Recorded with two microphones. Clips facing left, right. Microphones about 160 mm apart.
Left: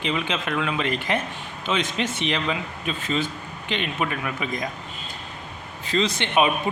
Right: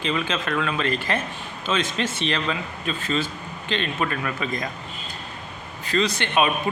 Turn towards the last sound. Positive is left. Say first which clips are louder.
# left 1 dB
turn(degrees=20)  # may be behind; listen again after turning